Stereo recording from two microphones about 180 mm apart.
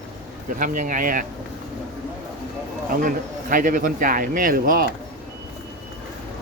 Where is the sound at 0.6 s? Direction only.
45° right (ahead or behind).